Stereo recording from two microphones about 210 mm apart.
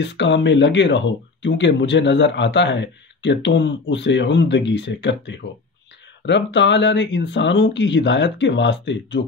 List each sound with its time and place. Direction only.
0.0 s speech: 55° left (ahead or behind)